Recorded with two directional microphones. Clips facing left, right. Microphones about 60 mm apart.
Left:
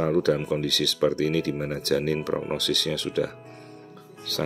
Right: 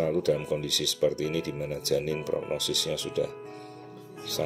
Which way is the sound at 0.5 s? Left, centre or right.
Left.